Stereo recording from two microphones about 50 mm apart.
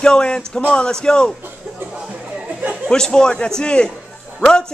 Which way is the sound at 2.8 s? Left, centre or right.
Centre.